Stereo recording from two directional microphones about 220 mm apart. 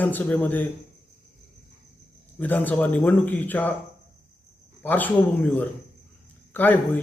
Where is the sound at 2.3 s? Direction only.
10° left (ahead or behind).